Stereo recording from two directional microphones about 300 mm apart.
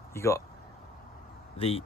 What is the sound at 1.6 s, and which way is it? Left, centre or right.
Speech, centre.